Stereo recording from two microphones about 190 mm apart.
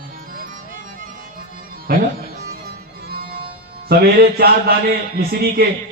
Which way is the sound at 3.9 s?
55° right (ahead or behind).